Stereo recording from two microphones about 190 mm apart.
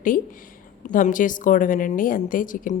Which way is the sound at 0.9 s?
45° left (ahead or behind).